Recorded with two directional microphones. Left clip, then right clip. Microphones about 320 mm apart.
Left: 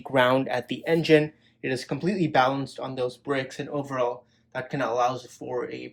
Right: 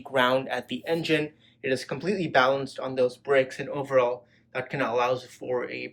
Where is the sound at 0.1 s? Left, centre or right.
Left.